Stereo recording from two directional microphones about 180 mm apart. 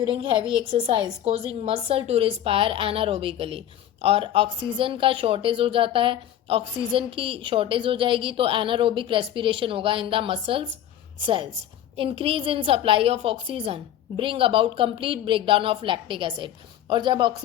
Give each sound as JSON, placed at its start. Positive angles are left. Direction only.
{"t": 0.0, "sound": "a woman's voice", "side_deg": -30}